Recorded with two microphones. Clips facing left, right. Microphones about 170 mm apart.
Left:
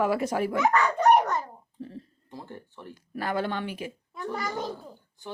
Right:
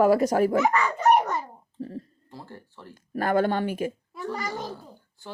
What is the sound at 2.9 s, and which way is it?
Speech, 50° right (ahead or behind).